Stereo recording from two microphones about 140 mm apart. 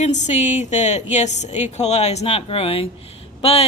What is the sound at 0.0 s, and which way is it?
A woman's voice, 55° left (ahead or behind).